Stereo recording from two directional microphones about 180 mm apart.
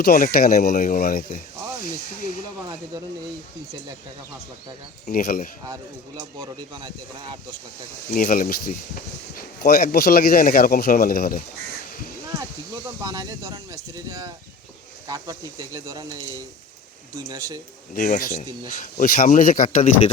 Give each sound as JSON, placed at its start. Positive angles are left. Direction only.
{"t": 0.0, "sound": "speech", "side_deg": 55}
{"t": 5.0, "sound": "speech", "side_deg": 50}
{"t": 5.6, "sound": "speech", "side_deg": -20}
{"t": 8.1, "sound": "speech", "side_deg": 50}
{"t": 13.0, "sound": "speech", "side_deg": -20}
{"t": 17.9, "sound": "speech", "side_deg": 50}